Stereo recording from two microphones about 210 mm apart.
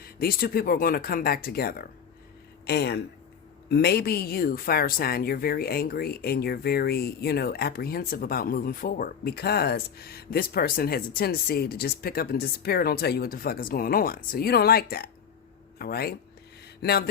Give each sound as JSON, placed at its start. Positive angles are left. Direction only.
{"t": 0.0, "sound": "a woman's voice", "side_deg": 45}